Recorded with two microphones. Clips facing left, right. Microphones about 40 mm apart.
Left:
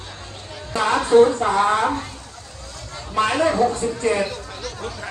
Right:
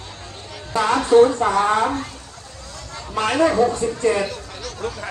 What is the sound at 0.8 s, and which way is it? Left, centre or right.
Speech, left.